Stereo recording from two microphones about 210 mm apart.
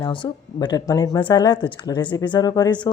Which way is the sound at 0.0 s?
20° left (ahead or behind).